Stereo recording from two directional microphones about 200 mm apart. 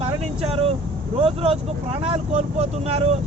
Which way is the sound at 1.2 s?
30° right (ahead or behind).